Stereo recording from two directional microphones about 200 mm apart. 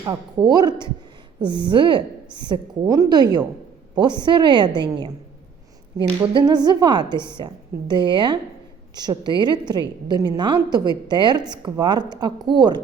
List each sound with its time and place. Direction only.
0.0 s a woman's voice: 20° right (ahead or behind)